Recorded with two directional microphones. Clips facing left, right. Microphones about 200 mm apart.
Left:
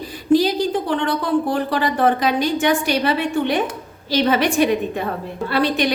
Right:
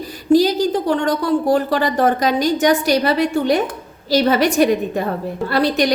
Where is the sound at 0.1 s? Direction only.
40° right (ahead or behind).